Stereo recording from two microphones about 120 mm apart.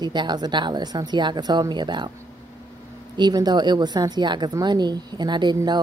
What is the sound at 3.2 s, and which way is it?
A woman's voice, 35° right (ahead or behind).